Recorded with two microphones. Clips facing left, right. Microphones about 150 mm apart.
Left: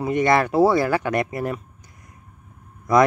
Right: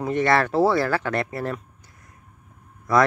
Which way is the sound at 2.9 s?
15° left (ahead or behind).